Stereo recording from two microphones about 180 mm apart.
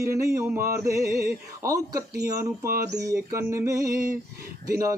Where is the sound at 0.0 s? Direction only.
15° right (ahead or behind).